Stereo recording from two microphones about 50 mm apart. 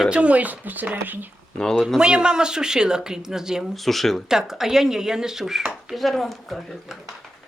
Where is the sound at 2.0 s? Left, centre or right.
Centre.